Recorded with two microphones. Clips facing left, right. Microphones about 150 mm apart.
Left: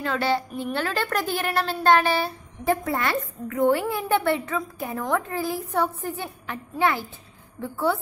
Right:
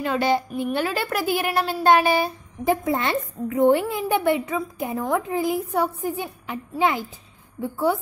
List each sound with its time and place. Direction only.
0.0 s a woman's voice: 15° right (ahead or behind)